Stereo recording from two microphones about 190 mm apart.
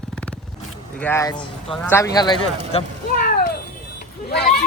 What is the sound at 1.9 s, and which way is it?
Speech, 20° left (ahead or behind).